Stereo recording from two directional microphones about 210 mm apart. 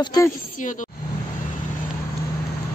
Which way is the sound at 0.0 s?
20° left (ahead or behind).